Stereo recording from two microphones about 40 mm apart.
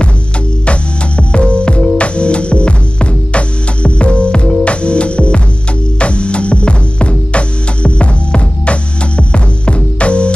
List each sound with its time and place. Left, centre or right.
0.7 s music: left